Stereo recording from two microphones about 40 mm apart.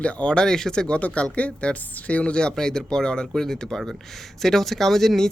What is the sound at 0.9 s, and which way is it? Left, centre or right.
Speech, left.